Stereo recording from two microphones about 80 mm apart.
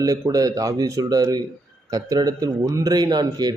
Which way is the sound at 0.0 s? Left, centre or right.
Right.